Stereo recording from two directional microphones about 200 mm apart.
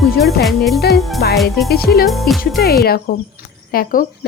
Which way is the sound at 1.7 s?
50° left (ahead or behind).